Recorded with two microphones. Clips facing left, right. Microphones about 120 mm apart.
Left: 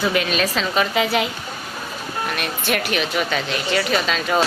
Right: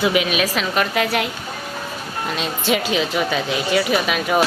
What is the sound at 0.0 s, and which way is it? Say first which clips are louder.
A woman's voice: right 2 dB; 5° right (ahead or behind).